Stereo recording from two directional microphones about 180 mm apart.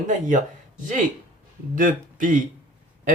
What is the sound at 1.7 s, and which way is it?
Speech, 45° right (ahead or behind).